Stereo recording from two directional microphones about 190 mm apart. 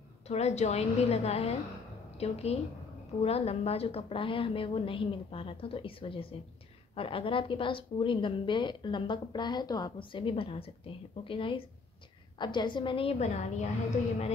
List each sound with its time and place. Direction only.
0.3 s a woman's voice: 35° left (ahead or behind)